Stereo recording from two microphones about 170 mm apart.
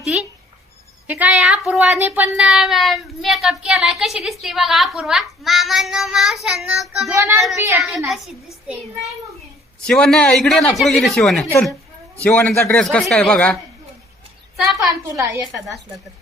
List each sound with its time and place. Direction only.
1.0 s speech: 10° right (ahead or behind)
7.5 s a woman's voice: 15° right (ahead or behind)
7.8 s speech: centre (ahead or behind)
9.8 s a woman's voice: 5° left (ahead or behind)
15.1 s a woman's voice: 15° right (ahead or behind)